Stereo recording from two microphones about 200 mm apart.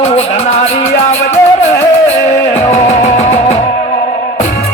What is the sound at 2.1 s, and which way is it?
Music, 35° left (ahead or behind).